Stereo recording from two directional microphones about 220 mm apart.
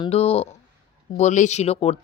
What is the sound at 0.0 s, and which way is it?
Speech, 25° left (ahead or behind).